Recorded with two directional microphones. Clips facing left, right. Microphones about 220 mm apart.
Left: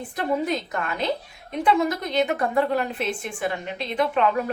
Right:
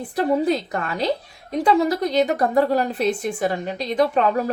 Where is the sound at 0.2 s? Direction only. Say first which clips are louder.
Right 5 dB; 35° right (ahead or behind).